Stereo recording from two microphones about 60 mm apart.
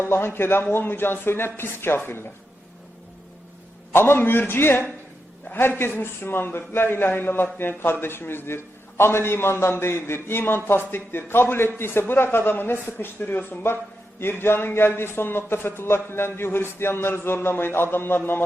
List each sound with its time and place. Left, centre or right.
0.1 s a man's voice: left
3.9 s a man's voice: left